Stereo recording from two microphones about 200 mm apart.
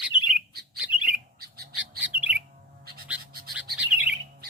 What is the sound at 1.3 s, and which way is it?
Bird, 50° right (ahead or behind).